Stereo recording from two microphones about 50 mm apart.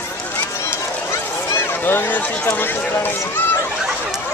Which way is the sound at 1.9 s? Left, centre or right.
Left.